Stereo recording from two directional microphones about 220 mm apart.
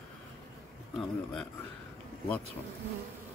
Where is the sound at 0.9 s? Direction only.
5° left (ahead or behind).